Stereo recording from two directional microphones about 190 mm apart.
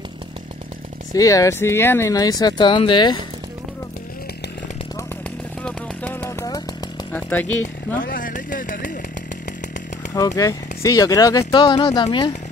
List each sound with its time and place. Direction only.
1.1 s speech: 20° left (ahead or behind)
5.6 s a sound: 5° left (ahead or behind)
7.1 s jackhammer: 10° left (ahead or behind)
8.0 s speech: 45° left (ahead or behind)
10.1 s speech: 20° left (ahead or behind)